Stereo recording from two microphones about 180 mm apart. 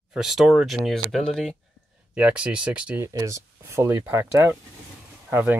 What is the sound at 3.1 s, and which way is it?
Speech, 20° right (ahead or behind).